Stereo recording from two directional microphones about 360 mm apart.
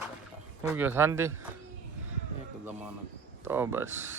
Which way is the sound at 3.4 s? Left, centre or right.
Centre.